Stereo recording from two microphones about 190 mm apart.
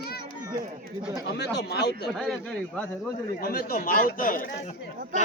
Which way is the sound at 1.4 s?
60° left (ahead or behind).